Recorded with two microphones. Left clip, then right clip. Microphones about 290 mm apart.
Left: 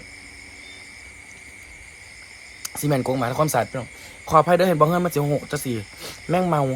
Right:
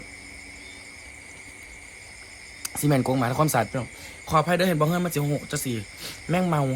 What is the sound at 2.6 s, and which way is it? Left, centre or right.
Speech, centre.